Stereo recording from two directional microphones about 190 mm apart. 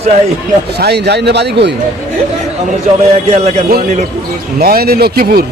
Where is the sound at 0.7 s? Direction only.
60° right (ahead or behind).